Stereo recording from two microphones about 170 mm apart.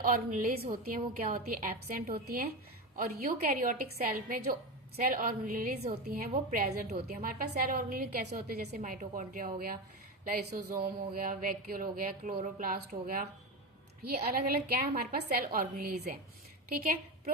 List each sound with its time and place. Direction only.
0.0 s a woman's voice: 55° right (ahead or behind)